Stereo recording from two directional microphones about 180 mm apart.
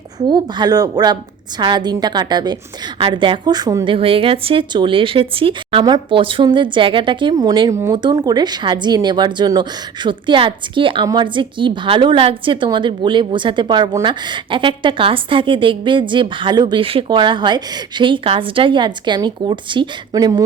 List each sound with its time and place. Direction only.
0.2 s speech: 25° right (ahead or behind)